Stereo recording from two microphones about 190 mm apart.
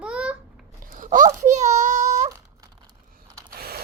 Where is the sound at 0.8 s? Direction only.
45° right (ahead or behind).